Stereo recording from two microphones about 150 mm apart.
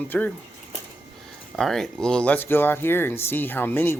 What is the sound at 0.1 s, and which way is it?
Speech, 10° left (ahead or behind).